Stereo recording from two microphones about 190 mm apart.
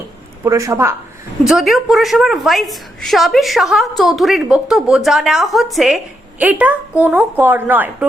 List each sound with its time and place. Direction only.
0.4 s a woman's voice: 15° right (ahead or behind)
1.5 s a woman's voice: centre (ahead or behind)